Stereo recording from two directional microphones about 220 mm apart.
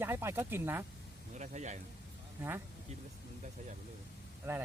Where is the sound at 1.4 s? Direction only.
30° right (ahead or behind).